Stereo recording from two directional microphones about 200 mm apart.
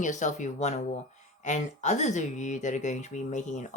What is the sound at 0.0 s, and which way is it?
Speech, 40° left (ahead or behind).